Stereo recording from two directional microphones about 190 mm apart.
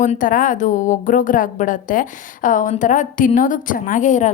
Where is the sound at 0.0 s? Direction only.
45° left (ahead or behind).